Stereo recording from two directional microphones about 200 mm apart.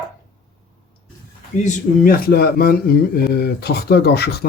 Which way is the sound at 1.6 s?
45° left (ahead or behind).